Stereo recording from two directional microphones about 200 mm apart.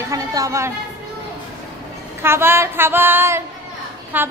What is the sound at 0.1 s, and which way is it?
Speech, 15° right (ahead or behind).